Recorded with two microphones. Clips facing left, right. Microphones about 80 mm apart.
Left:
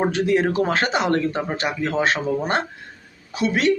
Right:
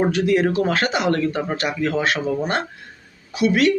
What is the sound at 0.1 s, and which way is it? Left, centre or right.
Speech, left.